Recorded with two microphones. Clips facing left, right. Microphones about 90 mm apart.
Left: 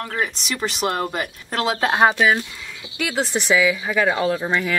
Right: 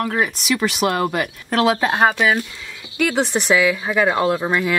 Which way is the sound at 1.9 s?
Centre (ahead or behind).